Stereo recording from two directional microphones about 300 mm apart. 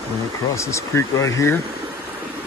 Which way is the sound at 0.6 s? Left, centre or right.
Centre.